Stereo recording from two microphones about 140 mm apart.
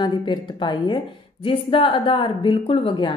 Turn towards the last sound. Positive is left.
turn(degrees=35)  # may be behind; listen again after turning